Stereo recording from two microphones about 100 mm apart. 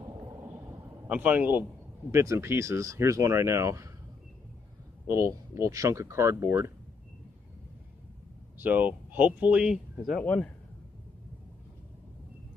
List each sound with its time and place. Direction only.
1.0 s speech: 15° right (ahead or behind)
5.0 s speech: 30° right (ahead or behind)
8.5 s speech: 15° right (ahead or behind)
10.2 s a man's voice: 15° left (ahead or behind)